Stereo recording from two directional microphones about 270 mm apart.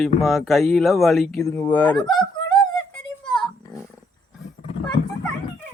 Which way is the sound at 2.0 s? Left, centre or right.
Centre.